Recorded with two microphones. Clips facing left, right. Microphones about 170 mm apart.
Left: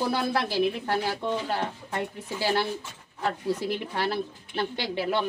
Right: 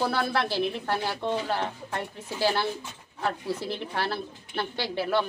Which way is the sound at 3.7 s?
15° left (ahead or behind).